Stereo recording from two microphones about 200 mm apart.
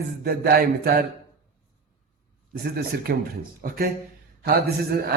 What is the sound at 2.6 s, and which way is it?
A man's voice, 50° right (ahead or behind).